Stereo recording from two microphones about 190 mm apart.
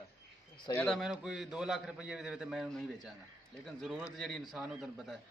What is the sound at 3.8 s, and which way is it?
A man's voice, 5° right (ahead or behind).